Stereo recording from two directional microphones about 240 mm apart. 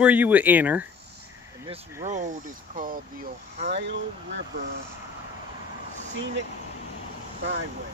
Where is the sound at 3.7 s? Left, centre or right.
Right.